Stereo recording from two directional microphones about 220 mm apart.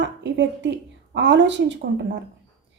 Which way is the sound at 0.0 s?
55° right (ahead or behind).